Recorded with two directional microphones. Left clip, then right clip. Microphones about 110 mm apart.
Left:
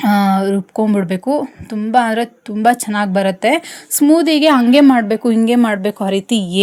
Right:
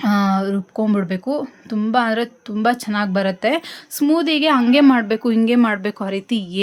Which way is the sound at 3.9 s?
45° left (ahead or behind).